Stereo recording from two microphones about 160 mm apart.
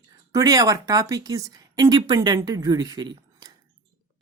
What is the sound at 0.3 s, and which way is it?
Speech, 20° right (ahead or behind).